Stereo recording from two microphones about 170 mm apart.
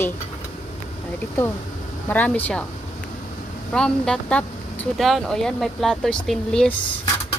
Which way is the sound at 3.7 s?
5° left (ahead or behind).